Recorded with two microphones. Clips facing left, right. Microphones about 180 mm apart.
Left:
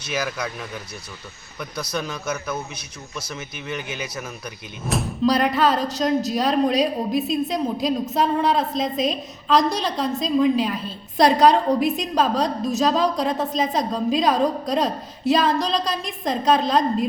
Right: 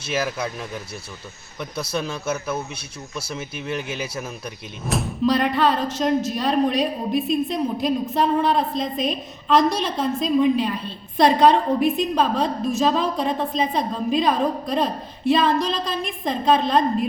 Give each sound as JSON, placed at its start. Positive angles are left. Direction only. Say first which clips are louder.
{"t": 1.7, "sound": "speech", "louder": "right 2 dB", "side_deg": -25}
{"t": 3.2, "sound": "speech", "louder": "right 3 dB", "side_deg": -30}
{"t": 4.8, "sound": "a woman's voice", "louder": "even", "side_deg": 0}